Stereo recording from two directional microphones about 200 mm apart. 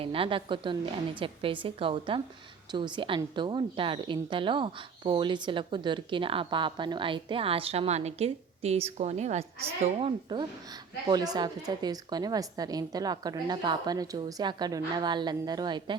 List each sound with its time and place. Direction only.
0.0 s a woman's voice: 25° right (ahead or behind)